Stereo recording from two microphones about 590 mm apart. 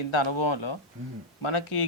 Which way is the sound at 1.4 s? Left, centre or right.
Left.